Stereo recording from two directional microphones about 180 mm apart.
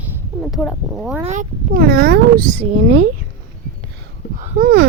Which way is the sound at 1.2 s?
45° right (ahead or behind).